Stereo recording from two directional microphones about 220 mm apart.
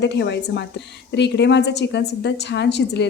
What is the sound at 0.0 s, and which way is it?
A woman's voice, 50° left (ahead or behind).